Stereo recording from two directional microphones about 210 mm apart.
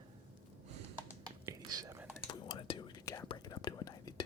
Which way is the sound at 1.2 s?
15° right (ahead or behind).